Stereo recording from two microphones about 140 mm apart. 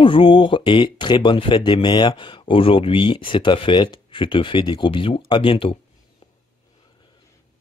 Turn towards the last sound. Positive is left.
turn(degrees=40)  # may be behind; listen again after turning